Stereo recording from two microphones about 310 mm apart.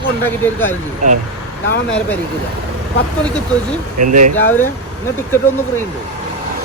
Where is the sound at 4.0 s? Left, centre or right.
Right.